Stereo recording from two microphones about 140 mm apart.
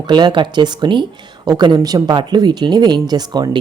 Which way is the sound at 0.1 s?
30° right (ahead or behind).